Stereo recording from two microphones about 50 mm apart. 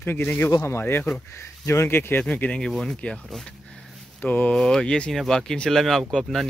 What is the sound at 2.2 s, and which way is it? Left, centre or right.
Speech, left.